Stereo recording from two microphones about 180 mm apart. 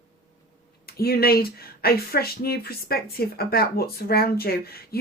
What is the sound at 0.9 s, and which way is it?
Speech, 60° left (ahead or behind).